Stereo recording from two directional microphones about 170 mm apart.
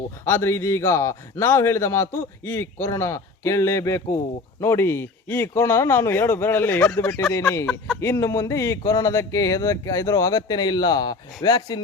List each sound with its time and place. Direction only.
0.3 s speech: 15° left (ahead or behind)